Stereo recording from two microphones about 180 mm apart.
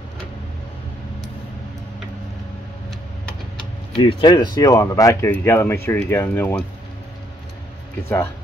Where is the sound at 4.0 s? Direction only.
25° left (ahead or behind); by 6.6 s 10° left (ahead or behind).